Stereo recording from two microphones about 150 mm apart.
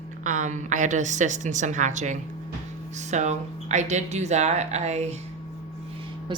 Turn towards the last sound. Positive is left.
turn(degrees=-50)  # may be behind; listen again after turning